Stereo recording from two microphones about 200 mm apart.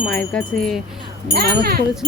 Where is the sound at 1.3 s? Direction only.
50° right (ahead or behind).